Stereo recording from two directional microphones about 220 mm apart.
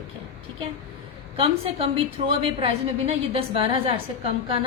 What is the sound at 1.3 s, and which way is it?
A woman's voice, 25° right (ahead or behind).